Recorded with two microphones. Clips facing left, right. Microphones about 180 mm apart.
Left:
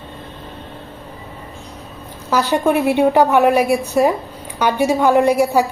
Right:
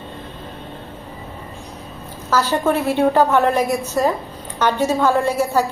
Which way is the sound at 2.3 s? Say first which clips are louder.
Left 2 dB; 15° left (ahead or behind).